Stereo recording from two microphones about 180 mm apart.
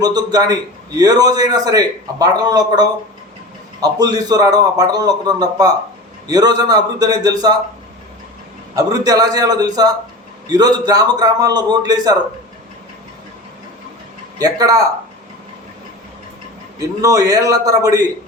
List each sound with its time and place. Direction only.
0.0 s a man's voice: 20° right (ahead or behind)
8.7 s a man's voice: 20° right (ahead or behind)
14.3 s a man's voice: 20° right (ahead or behind)
17.0 s a man's voice: 20° right (ahead or behind)